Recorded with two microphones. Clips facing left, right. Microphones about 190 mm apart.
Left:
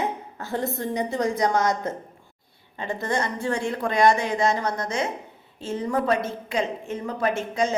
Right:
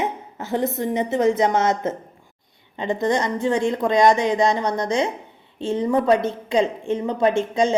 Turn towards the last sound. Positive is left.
turn(degrees=-30)  # may be behind; listen again after turning